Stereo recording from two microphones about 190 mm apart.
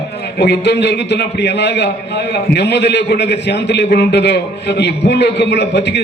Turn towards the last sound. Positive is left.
turn(degrees=65)  # may be behind; listen again after turning